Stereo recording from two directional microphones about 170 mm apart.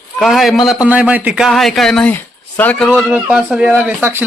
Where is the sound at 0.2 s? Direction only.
Centre (ahead or behind).